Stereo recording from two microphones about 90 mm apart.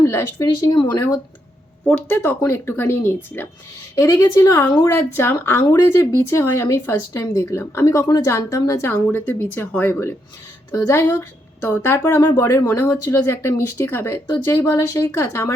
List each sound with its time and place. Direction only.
0.0 s speech: 30° left (ahead or behind)
0.7 s a woman's voice: 50° left (ahead or behind)
2.0 s a woman's voice: 20° left (ahead or behind)
3.9 s a woman's voice: 35° left (ahead or behind)
8.0 s a woman's voice: 45° left (ahead or behind)
8.3 s speech: 35° left (ahead or behind)
8.9 s a woman's voice: 20° left (ahead or behind)